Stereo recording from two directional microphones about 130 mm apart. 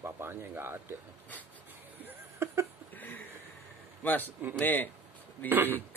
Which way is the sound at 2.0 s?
20° right (ahead or behind).